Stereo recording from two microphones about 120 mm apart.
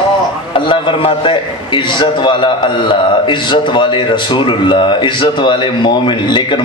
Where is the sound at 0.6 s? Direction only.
40° left (ahead or behind).